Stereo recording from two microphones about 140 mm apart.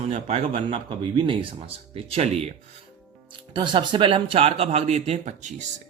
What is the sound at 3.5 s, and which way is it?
A man's voice, 35° right (ahead or behind).